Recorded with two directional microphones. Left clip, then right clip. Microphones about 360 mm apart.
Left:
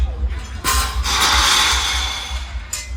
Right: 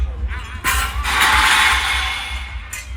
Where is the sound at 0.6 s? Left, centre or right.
Centre.